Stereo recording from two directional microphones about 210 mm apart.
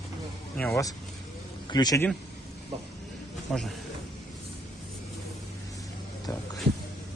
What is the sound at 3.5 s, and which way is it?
Speech, centre (ahead or behind).